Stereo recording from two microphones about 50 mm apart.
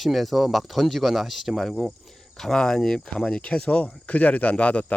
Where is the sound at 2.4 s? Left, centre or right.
Centre.